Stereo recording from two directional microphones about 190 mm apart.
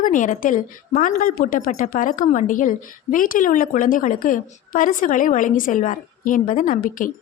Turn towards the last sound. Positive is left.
turn(degrees=45)  # may be behind; listen again after turning